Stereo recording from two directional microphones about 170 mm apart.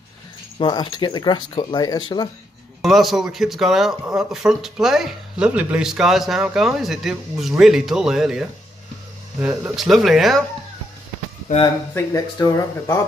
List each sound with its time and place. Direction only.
0.6 s speech: 25° left (ahead or behind)
2.8 s speech: centre (ahead or behind)
11.5 s speech: 50° left (ahead or behind)
11.9 s speech: 20° left (ahead or behind)